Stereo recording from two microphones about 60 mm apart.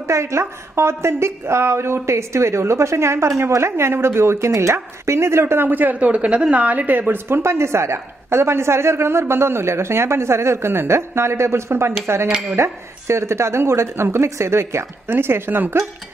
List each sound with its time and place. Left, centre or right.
0.0 s speech: right